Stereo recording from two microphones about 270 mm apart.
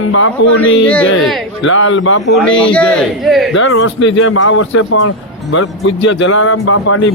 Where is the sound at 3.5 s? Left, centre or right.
Left.